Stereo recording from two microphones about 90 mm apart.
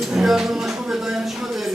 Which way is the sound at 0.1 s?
5° right (ahead or behind).